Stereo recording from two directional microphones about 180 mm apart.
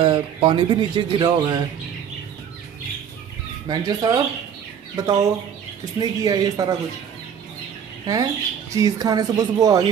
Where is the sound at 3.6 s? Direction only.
25° right (ahead or behind).